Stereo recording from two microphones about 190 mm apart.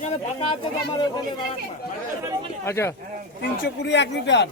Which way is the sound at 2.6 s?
15° left (ahead or behind).